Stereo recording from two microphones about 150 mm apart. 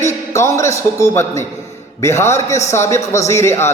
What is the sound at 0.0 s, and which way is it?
A man's voice, 20° left (ahead or behind).